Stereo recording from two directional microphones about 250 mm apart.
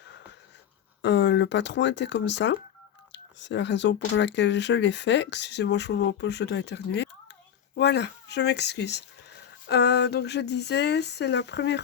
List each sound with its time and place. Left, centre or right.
1.0 s speech: left